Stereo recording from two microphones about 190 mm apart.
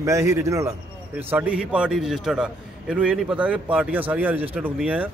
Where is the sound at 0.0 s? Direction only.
15° right (ahead or behind).